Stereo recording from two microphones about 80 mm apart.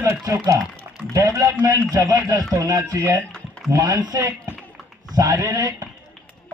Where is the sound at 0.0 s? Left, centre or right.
Right.